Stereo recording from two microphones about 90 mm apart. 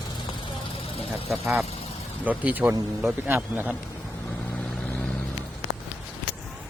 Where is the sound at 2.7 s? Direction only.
30° right (ahead or behind).